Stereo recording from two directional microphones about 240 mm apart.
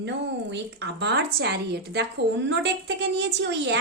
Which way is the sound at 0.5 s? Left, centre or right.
Right.